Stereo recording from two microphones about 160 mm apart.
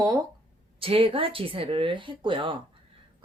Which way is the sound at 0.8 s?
35° right (ahead or behind).